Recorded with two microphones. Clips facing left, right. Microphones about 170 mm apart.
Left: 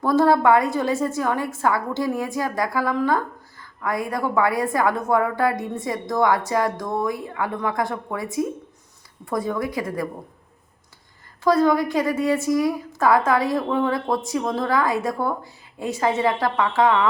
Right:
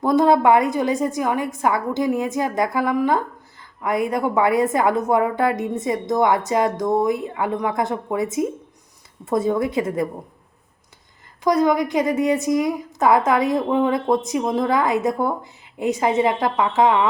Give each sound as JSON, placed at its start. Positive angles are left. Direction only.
{"t": 0.0, "sound": "a woman's voice", "side_deg": -20}
{"t": 11.4, "sound": "a woman's voice", "side_deg": -20}